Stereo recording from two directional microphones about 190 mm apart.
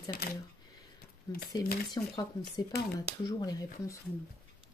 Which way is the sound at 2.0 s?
20° left (ahead or behind).